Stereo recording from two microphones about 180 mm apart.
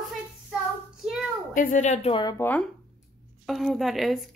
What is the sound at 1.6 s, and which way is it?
Speech, 45° left (ahead or behind).